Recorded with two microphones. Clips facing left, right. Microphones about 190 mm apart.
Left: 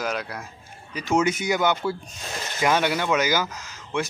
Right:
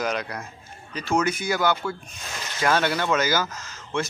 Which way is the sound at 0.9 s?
20° left (ahead or behind).